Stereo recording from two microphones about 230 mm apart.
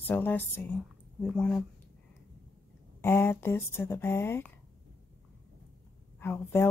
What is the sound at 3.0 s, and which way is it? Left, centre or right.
A woman's voice, centre.